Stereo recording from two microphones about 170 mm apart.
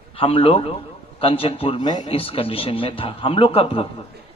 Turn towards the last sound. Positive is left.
turn(degrees=35)  # may be behind; listen again after turning